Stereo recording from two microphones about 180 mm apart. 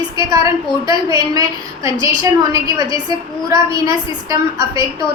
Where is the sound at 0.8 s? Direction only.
20° right (ahead or behind).